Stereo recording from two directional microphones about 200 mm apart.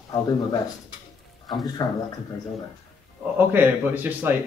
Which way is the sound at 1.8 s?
20° left (ahead or behind).